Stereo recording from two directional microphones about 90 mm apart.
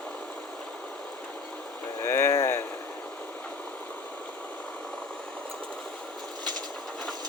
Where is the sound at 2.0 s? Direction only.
30° left (ahead or behind).